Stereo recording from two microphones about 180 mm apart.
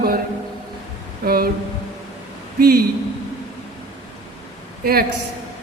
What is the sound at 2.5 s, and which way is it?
Speech, 55° right (ahead or behind).